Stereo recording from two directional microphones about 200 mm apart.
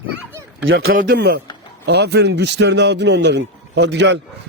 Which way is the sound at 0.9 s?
50° right (ahead or behind).